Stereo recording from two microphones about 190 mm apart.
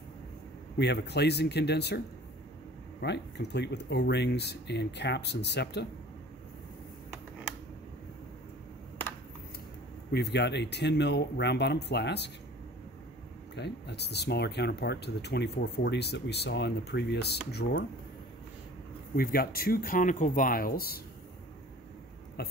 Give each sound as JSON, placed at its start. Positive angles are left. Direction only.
{"t": 0.7, "sound": "speech", "side_deg": 60}
{"t": 3.0, "sound": "speech", "side_deg": 65}
{"t": 10.1, "sound": "speech", "side_deg": 65}
{"t": 13.6, "sound": "speech", "side_deg": 60}
{"t": 19.1, "sound": "speech", "side_deg": 55}
{"t": 22.4, "sound": "a sound", "side_deg": 60}